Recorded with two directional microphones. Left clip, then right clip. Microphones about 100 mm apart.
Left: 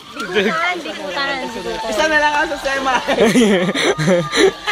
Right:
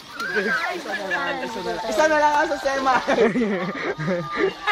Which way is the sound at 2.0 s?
50° right (ahead or behind).